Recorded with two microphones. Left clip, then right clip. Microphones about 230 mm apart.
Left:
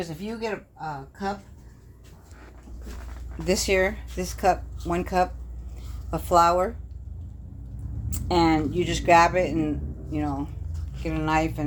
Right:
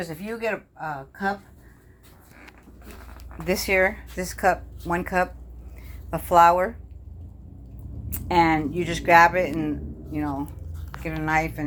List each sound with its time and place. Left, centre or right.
0.0 s speech: right
3.4 s speech: centre
8.1 s speech: centre